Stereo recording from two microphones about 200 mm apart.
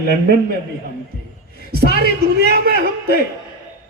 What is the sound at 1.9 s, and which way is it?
A man's voice, 55° right (ahead or behind).